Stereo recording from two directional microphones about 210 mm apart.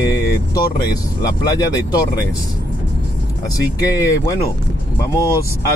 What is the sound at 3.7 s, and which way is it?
Speech, 15° left (ahead or behind).